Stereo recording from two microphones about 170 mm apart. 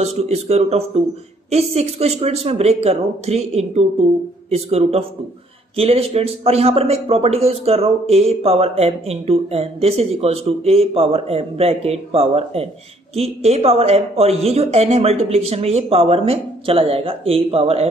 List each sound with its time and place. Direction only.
0.0 s a man's voice: 40° right (ahead or behind)